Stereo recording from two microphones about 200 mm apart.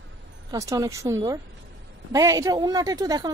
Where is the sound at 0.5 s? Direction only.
15° right (ahead or behind).